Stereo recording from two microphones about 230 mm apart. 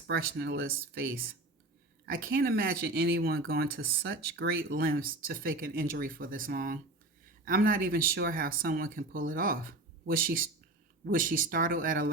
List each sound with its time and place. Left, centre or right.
0.1 s speech: right